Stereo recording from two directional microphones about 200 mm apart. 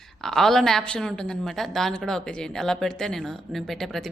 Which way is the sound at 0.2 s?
Centre (ahead or behind).